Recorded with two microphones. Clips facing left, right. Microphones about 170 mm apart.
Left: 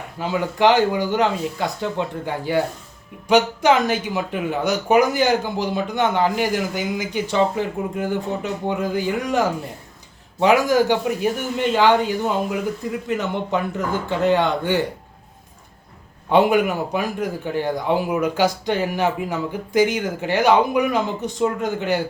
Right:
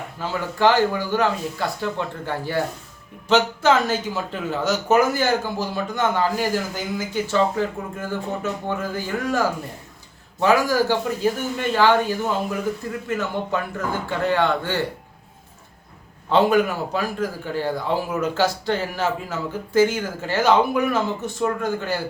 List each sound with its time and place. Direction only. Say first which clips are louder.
0.2 s speech: left 2 dB; 15° left (ahead or behind)
16.3 s speech: left 1 dB; 15° left (ahead or behind)